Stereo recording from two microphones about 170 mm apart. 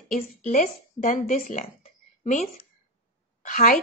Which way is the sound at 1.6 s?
45° left (ahead or behind).